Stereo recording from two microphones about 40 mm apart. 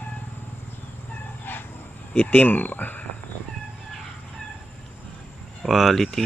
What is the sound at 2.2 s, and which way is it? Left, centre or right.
Speech, left.